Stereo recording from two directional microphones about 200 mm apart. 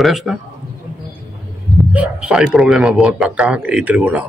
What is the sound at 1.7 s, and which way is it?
A man's voice, 5° right (ahead or behind).